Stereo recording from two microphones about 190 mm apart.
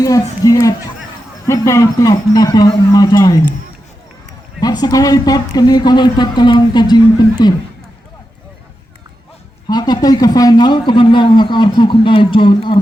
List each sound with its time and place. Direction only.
0.0 s a man's voice: 20° left (ahead or behind)
4.6 s a man's voice: 20° left (ahead or behind)
9.6 s a man's voice: 20° left (ahead or behind)